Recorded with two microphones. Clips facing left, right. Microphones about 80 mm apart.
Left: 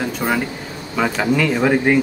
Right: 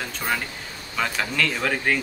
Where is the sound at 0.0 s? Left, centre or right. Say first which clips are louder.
Left 7 dB; centre.